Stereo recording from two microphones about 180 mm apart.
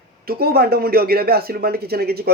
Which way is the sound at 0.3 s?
60° right (ahead or behind).